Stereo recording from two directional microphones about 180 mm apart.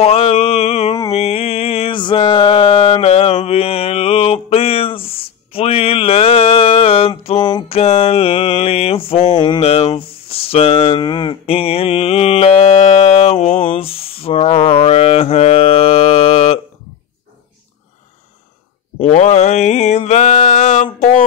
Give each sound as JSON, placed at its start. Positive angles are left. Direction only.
{"t": 0.0, "sound": "mantra", "side_deg": 35}
{"t": 1.1, "sound": "a sound", "side_deg": 35}
{"t": 18.9, "sound": "mantra", "side_deg": 35}